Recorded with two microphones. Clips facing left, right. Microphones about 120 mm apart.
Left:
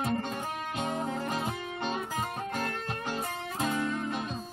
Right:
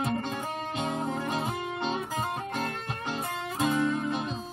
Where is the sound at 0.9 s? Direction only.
20° right (ahead or behind).